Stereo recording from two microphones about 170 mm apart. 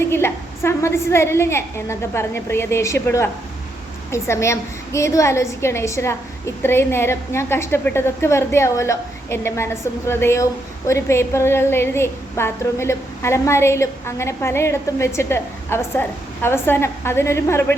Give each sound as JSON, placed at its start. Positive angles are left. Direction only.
{"t": 0.0, "sound": "a woman's voice", "side_deg": 15}